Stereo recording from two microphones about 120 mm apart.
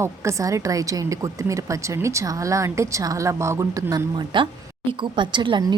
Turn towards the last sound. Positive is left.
turn(degrees=-40)  # may be behind; listen again after turning